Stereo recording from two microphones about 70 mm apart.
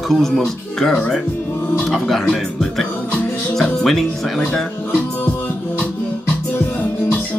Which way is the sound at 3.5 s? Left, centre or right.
Centre.